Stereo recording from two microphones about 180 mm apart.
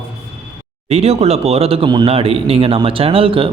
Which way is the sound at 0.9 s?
35° right (ahead or behind).